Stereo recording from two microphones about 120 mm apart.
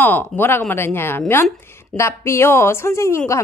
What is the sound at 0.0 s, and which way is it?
A woman's voice, 15° left (ahead or behind).